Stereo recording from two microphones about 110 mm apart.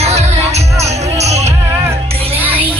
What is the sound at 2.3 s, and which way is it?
Music, 60° right (ahead or behind).